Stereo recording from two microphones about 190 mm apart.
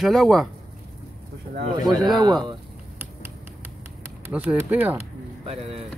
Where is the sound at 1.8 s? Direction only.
20° right (ahead or behind).